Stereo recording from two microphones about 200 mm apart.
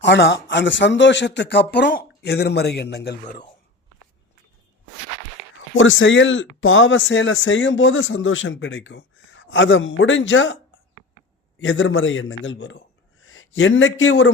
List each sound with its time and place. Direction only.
0.0 s speech: 60° left (ahead or behind)
5.7 s speech: 75° left (ahead or behind)
11.6 s a man's voice: 70° left (ahead or behind)